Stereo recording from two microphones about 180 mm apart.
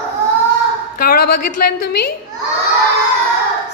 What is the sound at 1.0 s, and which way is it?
A woman's voice, 55° left (ahead or behind).